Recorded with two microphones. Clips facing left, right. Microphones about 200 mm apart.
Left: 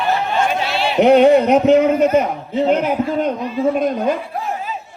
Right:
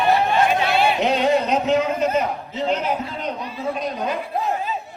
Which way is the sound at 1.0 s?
60° left (ahead or behind).